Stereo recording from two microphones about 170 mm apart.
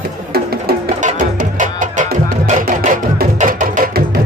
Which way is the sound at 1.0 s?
50° right (ahead or behind).